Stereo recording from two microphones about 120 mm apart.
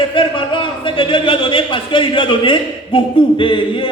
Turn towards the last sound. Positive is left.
turn(degrees=45)  # may be behind; listen again after turning